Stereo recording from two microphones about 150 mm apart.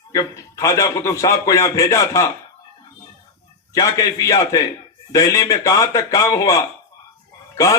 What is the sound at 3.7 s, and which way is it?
A man's voice, 25° left (ahead or behind).